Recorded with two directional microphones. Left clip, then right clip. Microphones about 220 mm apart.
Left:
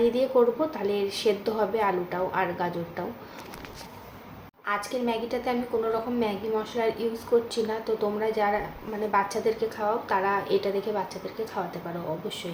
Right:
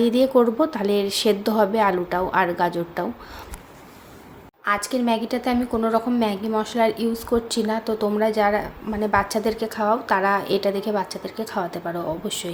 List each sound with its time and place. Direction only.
0.0 s a woman's voice: 55° right (ahead or behind)
4.6 s a woman's voice: 55° right (ahead or behind)